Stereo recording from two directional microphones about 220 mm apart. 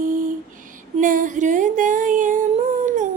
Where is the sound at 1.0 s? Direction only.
35° right (ahead or behind).